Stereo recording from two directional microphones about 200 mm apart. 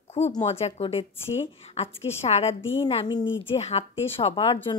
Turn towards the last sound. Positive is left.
turn(degrees=30)  # may be behind; listen again after turning